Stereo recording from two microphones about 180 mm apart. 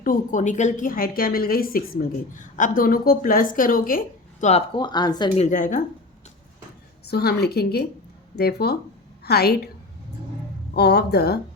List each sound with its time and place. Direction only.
0.0 s a woman's voice: 50° left (ahead or behind)
4.8 s speech: 25° left (ahead or behind)
5.4 s a woman's voice: 45° left (ahead or behind)
7.1 s a woman's voice: 65° left (ahead or behind)
10.8 s a woman's voice: 65° left (ahead or behind)